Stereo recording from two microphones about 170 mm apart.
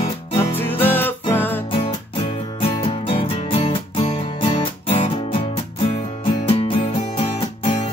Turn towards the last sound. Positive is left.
turn(degrees=30)  # may be behind; listen again after turning